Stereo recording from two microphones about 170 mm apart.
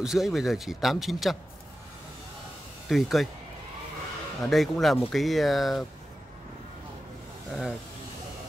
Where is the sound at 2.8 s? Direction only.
Centre (ahead or behind).